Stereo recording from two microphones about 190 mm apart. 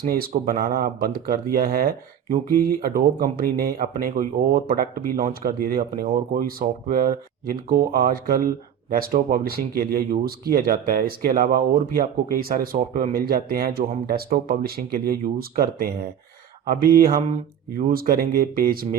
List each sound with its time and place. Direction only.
0.0 s speech: 50° right (ahead or behind)